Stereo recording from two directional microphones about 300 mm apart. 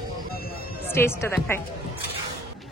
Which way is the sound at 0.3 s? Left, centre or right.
Left.